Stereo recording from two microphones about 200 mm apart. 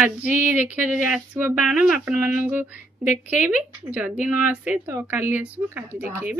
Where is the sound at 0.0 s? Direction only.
10° right (ahead or behind).